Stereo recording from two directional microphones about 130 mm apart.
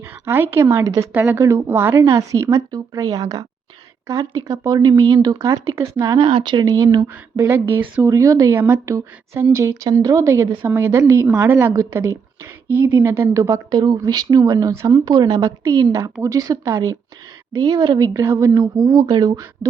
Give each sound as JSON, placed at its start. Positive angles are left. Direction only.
{"t": 0.0, "sound": "a woman's voice", "side_deg": -15}
{"t": 11.7, "sound": "speech", "side_deg": -30}
{"t": 12.7, "sound": "speech", "side_deg": -15}